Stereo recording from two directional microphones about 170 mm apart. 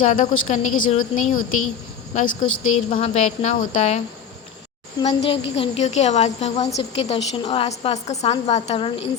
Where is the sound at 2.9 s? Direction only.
40° left (ahead or behind).